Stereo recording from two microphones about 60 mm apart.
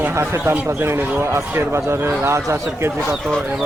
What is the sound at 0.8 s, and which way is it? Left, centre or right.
A man's voice, right.